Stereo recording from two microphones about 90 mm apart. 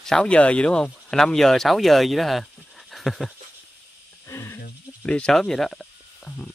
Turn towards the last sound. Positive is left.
turn(degrees=5)  # may be behind; listen again after turning